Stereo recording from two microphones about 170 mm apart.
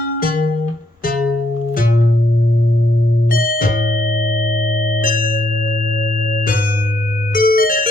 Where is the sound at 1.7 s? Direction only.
55° left (ahead or behind).